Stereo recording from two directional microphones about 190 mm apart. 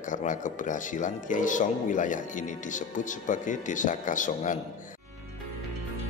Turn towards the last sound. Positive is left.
turn(degrees=40)  # may be behind; listen again after turning